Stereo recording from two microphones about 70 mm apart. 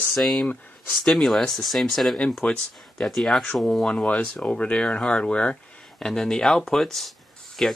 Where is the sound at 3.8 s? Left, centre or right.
Centre.